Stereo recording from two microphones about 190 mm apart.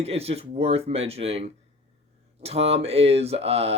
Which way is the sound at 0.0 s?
30° right (ahead or behind).